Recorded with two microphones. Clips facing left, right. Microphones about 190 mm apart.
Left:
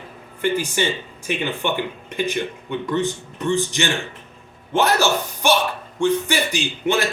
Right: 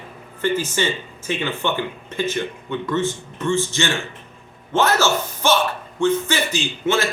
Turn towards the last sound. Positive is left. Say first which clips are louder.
# even
turn(degrees=15)  # may be behind; listen again after turning